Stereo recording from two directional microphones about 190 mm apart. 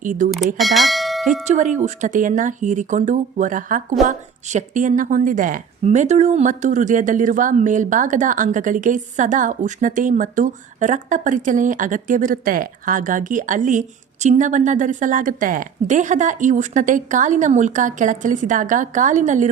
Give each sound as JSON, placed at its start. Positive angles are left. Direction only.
{"t": 0.0, "sound": "speech", "side_deg": -45}
{"t": 0.3, "sound": "speech", "side_deg": 0}
{"t": 1.3, "sound": "a woman's voice", "side_deg": -40}